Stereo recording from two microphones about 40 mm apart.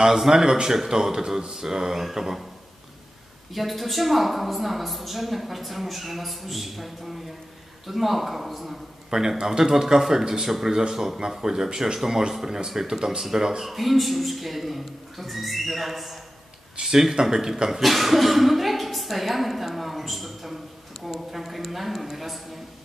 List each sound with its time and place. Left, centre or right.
0.0 s speech: centre
3.5 s speech: centre
9.1 s speech: centre
13.7 s speech: centre